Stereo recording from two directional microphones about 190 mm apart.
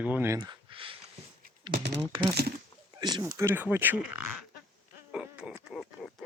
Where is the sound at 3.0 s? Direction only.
20° right (ahead or behind).